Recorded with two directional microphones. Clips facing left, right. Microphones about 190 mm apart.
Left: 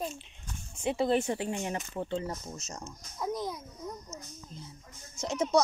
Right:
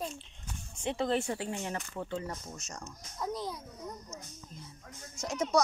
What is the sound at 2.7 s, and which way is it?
Speech, 15° left (ahead or behind).